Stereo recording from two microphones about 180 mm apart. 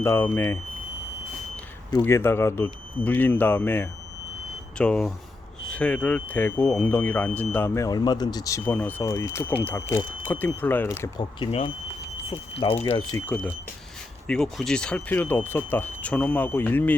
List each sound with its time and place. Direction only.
0.0 s speech: 15° left (ahead or behind)
2.0 s speech: 15° left (ahead or behind)
11.3 s speech: 30° left (ahead or behind)
12.8 s speech: 20° left (ahead or behind)
13.2 s speech: 5° left (ahead or behind)